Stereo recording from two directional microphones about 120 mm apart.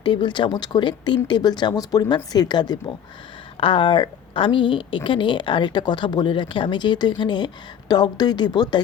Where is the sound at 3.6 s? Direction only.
45° left (ahead or behind).